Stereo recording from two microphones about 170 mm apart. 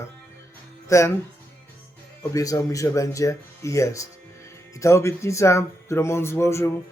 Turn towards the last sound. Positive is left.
turn(degrees=15)  # may be behind; listen again after turning